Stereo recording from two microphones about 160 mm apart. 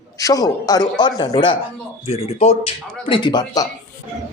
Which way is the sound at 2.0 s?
45° left (ahead or behind).